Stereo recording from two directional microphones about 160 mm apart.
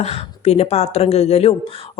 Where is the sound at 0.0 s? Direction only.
40° left (ahead or behind).